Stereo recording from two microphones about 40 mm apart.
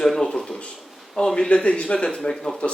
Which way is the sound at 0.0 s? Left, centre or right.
Centre.